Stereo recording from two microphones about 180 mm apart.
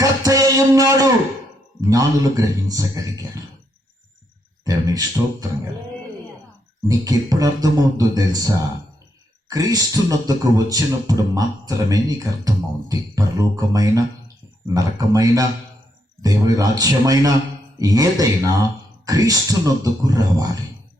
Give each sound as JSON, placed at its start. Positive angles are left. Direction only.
{"t": 0.0, "sound": "music", "side_deg": -20}
{"t": 1.9, "sound": "a man's voice", "side_deg": -20}
{"t": 4.6, "sound": "a man's voice", "side_deg": -20}
{"t": 6.8, "sound": "a man's voice", "side_deg": -20}